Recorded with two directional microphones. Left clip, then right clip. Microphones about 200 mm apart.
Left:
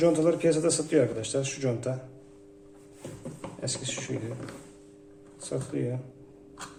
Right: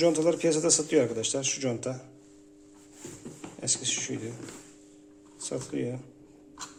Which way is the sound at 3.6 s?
30° right (ahead or behind).